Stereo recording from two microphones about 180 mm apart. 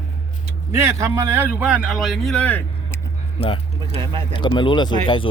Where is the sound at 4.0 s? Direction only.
25° right (ahead or behind).